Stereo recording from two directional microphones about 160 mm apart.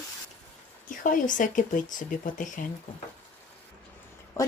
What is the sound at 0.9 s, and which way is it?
Speech, 55° left (ahead or behind).